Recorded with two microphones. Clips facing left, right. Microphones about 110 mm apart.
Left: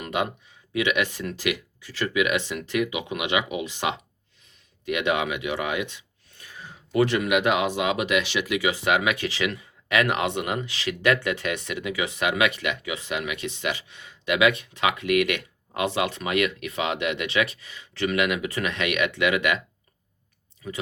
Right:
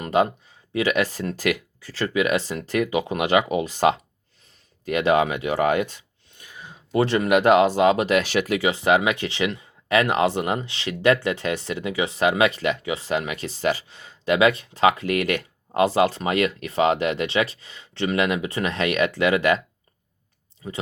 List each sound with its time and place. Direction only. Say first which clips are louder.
0.0 s speech: right 7 dB; 35° right (ahead or behind)
6.3 s a sound: right 1 dB; 20° right (ahead or behind)
6.9 s speech: right 2 dB; 30° right (ahead or behind)